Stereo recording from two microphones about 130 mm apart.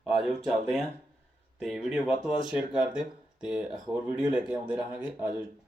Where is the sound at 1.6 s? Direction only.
Centre (ahead or behind).